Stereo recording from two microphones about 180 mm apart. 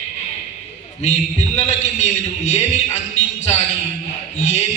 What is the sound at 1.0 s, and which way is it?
Speech, 40° left (ahead or behind).